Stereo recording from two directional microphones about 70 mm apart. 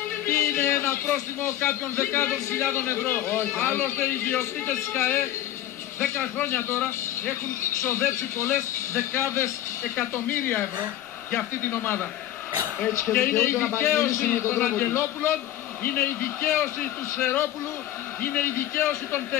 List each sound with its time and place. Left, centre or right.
0.3 s a sound: left
1.4 s a man's voice: left
6.4 s a man's voice: left
13.1 s a man's voice: left
14.2 s a man's voice: left
18.2 s a man's voice: left